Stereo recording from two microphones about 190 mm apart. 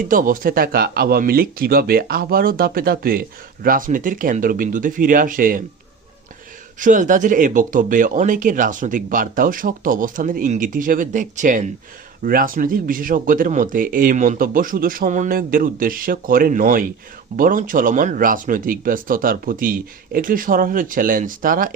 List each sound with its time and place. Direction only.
0.0 s speech: 45° right (ahead or behind)
6.7 s speech: 45° right (ahead or behind)